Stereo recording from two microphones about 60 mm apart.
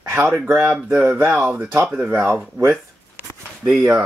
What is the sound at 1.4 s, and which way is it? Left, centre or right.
Speech, right.